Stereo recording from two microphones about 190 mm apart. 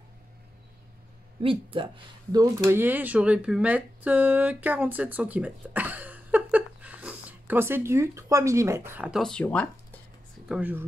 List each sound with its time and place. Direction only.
1.4 s speech: 30° right (ahead or behind)
2.3 s speech: 15° right (ahead or behind); by 9.9 s 10° left (ahead or behind)
10.5 s speech: 10° right (ahead or behind)